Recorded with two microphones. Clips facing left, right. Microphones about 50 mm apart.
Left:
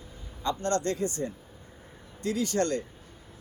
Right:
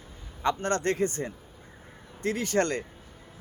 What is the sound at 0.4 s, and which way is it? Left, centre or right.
Speech, right.